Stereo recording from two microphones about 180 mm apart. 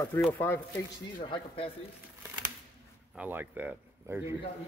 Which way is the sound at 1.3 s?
30° left (ahead or behind).